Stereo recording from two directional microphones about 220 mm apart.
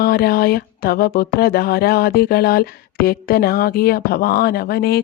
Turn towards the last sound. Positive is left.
turn(degrees=45)  # may be behind; listen again after turning